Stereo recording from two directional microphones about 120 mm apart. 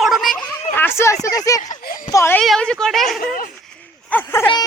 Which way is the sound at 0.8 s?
20° left (ahead or behind).